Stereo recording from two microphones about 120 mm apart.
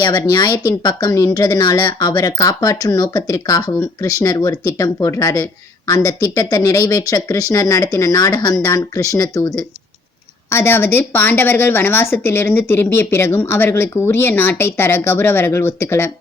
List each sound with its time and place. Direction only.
0.0 s speech: 30° left (ahead or behind)